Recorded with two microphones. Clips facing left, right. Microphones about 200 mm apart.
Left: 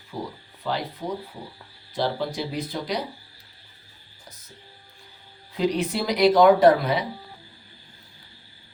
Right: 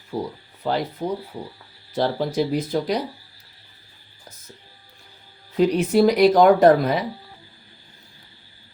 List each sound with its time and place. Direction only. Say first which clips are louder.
0.6 s speech: right 5 dB; 45° right (ahead or behind)
5.5 s speech: right 7 dB; 45° right (ahead or behind)